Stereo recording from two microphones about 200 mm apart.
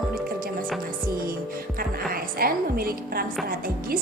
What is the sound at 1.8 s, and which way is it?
A woman's voice, 45° right (ahead or behind).